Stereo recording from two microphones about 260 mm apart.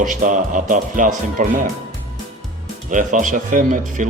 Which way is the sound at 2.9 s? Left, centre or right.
Right.